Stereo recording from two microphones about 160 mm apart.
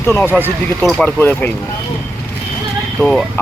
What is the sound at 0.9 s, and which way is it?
Speech, 10° left (ahead or behind).